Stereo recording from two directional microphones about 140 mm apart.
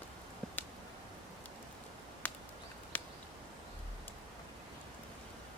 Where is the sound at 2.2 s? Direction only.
15° left (ahead or behind).